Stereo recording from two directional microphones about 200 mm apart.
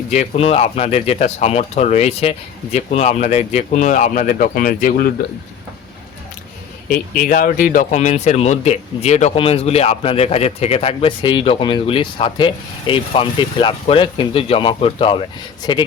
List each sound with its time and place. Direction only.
0.1 s speech: 30° left (ahead or behind)
6.8 s speech: 45° left (ahead or behind); by 15.9 s 25° left (ahead or behind)